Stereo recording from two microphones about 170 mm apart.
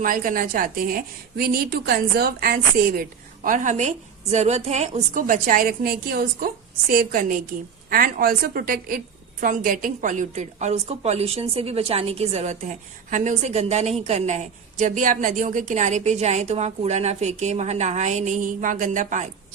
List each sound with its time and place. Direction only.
0.0 s a woman's voice: 55° right (ahead or behind)